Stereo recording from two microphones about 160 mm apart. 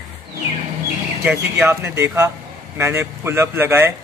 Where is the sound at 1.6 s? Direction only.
15° right (ahead or behind).